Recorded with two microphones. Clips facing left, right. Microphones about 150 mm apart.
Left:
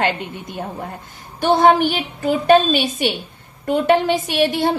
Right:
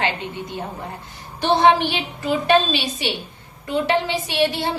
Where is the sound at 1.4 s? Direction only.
50° left (ahead or behind).